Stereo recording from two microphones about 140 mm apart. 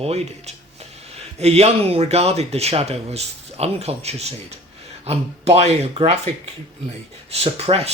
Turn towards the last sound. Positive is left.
turn(degrees=-45)  # may be behind; listen again after turning